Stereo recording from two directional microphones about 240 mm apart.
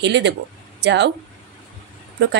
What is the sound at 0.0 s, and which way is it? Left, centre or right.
Speech, right.